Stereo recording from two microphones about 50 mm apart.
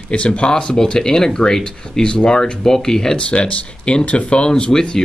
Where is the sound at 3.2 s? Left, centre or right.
Left.